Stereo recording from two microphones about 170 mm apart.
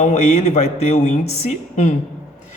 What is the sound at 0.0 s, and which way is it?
A man's voice, 40° left (ahead or behind).